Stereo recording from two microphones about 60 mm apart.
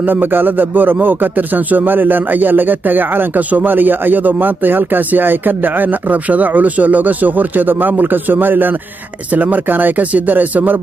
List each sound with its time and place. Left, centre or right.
0.0 s speech: right